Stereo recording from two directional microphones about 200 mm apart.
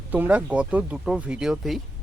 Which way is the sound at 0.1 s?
5° right (ahead or behind).